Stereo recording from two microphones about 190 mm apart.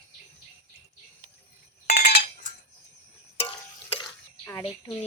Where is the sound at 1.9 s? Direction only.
50° left (ahead or behind).